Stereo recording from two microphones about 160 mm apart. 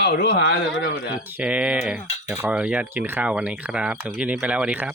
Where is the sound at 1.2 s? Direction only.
10° right (ahead or behind).